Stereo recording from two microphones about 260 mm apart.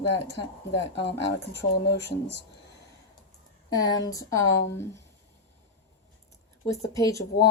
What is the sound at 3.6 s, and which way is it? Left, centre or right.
Speech, centre.